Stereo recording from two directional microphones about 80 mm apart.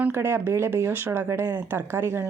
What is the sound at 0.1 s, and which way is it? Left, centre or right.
Speech, right.